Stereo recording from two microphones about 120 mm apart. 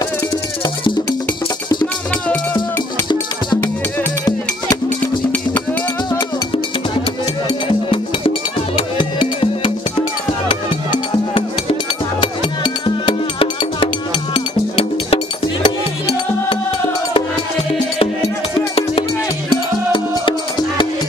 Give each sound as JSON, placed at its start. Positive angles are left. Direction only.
{"t": 7.4, "sound": "music", "side_deg": 50}
{"t": 15.6, "sound": "music", "side_deg": 40}
{"t": 19.9, "sound": "music", "side_deg": 45}